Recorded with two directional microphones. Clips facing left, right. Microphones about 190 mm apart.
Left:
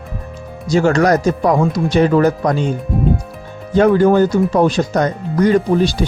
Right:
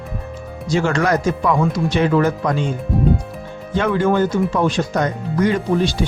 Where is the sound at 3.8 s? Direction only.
40° left (ahead or behind).